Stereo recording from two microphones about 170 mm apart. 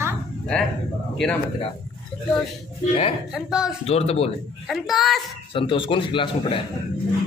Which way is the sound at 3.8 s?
35° left (ahead or behind).